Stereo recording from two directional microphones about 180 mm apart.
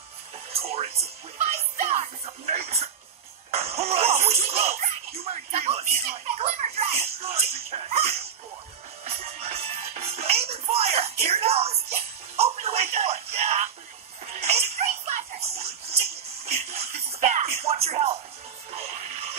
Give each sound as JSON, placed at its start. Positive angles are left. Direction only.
{"t": 0.5, "sound": "speech", "side_deg": -35}
{"t": 9.0, "sound": "music", "side_deg": -35}
{"t": 14.3, "sound": "a sound", "side_deg": -35}
{"t": 16.4, "sound": "music", "side_deg": -35}